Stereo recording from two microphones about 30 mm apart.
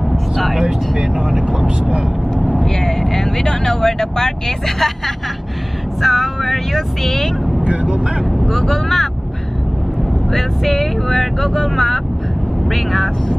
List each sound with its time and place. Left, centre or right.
0.1 s vehicle: centre
0.6 s vehicle: centre
1.8 s speech: right
2.6 s speech: centre
7.6 s speech: right
8.5 s speech: centre
10.3 s speech: centre